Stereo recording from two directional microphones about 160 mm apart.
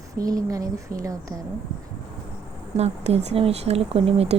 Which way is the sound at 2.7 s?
40° right (ahead or behind).